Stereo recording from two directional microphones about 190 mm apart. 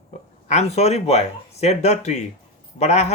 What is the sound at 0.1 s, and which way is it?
Speech, 35° left (ahead or behind).